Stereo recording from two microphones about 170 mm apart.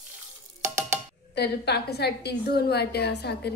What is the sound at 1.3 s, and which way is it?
A woman's voice, 75° left (ahead or behind).